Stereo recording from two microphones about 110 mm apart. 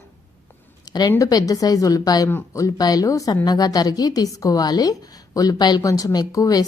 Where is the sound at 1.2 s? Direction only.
35° left (ahead or behind).